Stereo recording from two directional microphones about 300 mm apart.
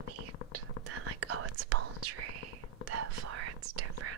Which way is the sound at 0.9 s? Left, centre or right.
Right.